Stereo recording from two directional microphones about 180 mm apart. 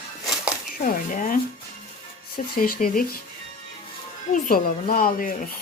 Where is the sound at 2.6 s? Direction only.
50° left (ahead or behind).